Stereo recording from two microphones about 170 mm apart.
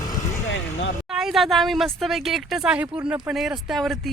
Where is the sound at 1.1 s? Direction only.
Centre (ahead or behind).